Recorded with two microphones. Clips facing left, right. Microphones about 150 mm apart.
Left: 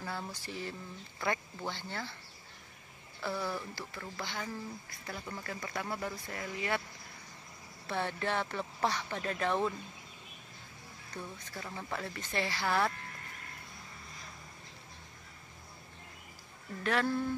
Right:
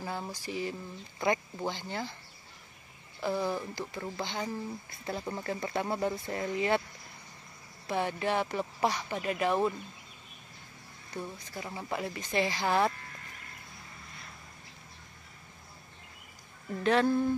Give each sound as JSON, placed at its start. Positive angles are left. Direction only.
{"t": 0.0, "sound": "speech", "side_deg": -15}
{"t": 3.2, "sound": "speech", "side_deg": -20}
{"t": 7.8, "sound": "speech", "side_deg": -15}
{"t": 11.1, "sound": "speech", "side_deg": -10}
{"t": 16.8, "sound": "speech", "side_deg": -20}